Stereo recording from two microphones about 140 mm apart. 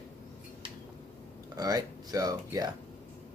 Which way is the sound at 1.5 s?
25° right (ahead or behind).